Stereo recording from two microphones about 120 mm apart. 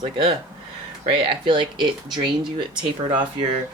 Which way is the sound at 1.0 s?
45° right (ahead or behind).